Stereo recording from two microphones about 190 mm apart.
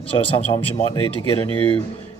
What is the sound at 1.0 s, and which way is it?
Speech, 30° right (ahead or behind).